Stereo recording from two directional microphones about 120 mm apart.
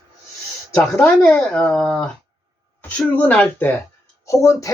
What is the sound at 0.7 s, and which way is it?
Speech, 15° left (ahead or behind).